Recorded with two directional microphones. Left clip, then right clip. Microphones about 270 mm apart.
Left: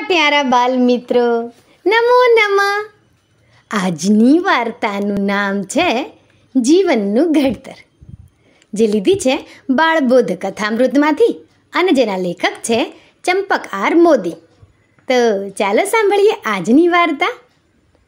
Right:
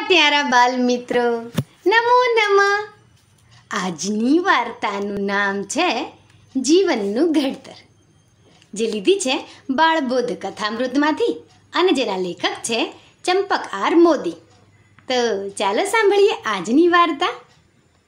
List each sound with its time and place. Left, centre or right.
0.0 s a woman's voice: left